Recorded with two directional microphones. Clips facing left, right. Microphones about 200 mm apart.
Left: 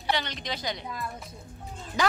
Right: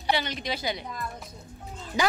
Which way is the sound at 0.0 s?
10° right (ahead or behind).